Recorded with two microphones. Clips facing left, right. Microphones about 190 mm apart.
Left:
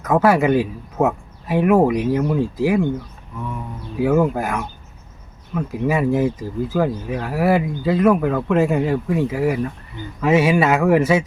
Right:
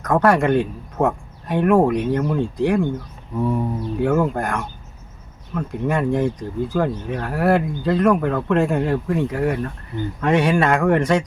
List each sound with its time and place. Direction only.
0.0 s speech: 5° left (ahead or behind)
3.3 s a sound: 35° right (ahead or behind)
3.9 s speech: 5° left (ahead or behind)